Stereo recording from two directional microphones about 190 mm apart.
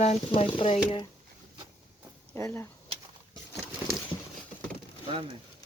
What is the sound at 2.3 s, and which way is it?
Speech, 10° left (ahead or behind).